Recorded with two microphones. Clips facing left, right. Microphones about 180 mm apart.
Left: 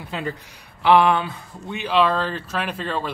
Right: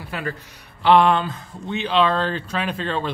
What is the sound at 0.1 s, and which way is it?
Speech, 20° left (ahead or behind).